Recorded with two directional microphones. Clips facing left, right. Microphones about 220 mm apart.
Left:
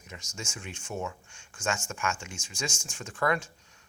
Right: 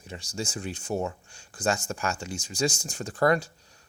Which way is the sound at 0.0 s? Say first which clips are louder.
Right 8 dB; 35° right (ahead or behind).